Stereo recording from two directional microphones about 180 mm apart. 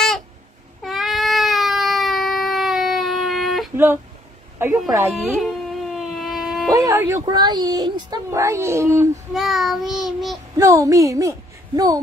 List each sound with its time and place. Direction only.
0.8 s cat: centre (ahead or behind)
3.7 s speech: 10° right (ahead or behind)
5.2 s dog: centre (ahead or behind)
6.7 s speech: 15° right (ahead or behind)
9.3 s child singing: centre (ahead or behind)
10.6 s a woman's voice: 20° right (ahead or behind)